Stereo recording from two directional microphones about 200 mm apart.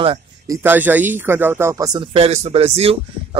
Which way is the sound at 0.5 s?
10° right (ahead or behind).